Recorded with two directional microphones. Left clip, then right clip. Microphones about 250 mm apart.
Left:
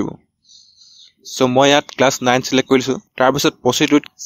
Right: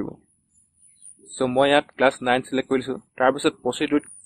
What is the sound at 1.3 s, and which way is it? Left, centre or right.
Speech, left.